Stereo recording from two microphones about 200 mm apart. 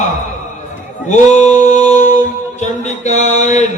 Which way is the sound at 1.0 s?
35° left (ahead or behind).